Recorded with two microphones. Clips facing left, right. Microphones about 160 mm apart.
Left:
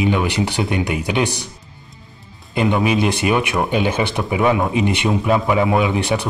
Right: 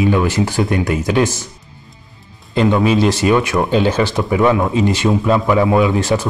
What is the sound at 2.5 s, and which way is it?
Speech, 15° left (ahead or behind).